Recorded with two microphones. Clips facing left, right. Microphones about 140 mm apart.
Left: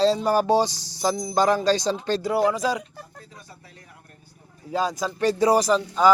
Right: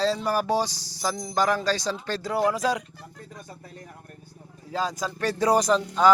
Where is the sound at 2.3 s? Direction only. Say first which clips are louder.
Left 1 dB; 5° left (ahead or behind).